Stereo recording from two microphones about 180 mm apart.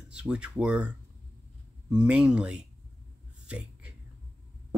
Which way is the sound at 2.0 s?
5° right (ahead or behind).